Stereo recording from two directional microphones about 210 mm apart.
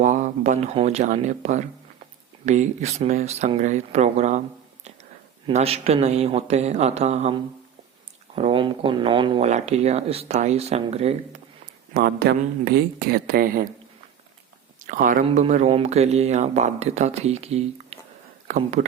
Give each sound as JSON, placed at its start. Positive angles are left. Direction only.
{"t": 0.0, "sound": "speech", "side_deg": -35}
{"t": 11.9, "sound": "speech", "side_deg": -50}
{"t": 14.8, "sound": "speech", "side_deg": -40}
{"t": 17.9, "sound": "a sound", "side_deg": -30}
{"t": 18.4, "sound": "speech", "side_deg": -35}